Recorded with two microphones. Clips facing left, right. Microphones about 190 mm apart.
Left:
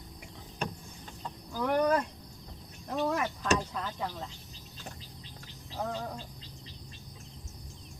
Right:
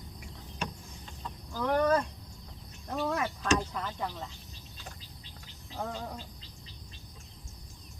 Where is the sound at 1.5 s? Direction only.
10° left (ahead or behind).